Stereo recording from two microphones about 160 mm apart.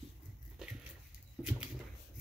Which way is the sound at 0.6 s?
5° right (ahead or behind).